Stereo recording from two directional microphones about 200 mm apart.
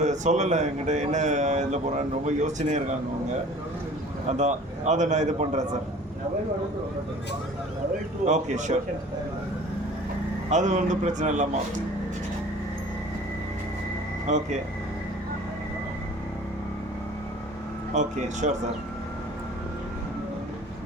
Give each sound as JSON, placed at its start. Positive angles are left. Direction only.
{"t": 0.0, "sound": "speech", "side_deg": -35}
{"t": 4.3, "sound": "speech", "side_deg": -35}
{"t": 8.2, "sound": "speech", "side_deg": -35}
{"t": 10.5, "sound": "speech", "side_deg": -35}
{"t": 14.3, "sound": "speech", "side_deg": -35}
{"t": 17.9, "sound": "speech", "side_deg": -35}